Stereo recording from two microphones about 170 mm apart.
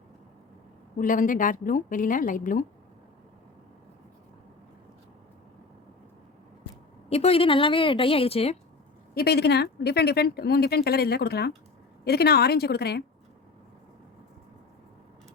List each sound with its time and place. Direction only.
0.9 s a woman's voice: 50° left (ahead or behind)
7.1 s a woman's voice: 35° left (ahead or behind)
9.1 s speech: 70° left (ahead or behind)